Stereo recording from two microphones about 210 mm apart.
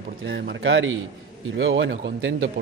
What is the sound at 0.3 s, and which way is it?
A man's voice, 60° right (ahead or behind).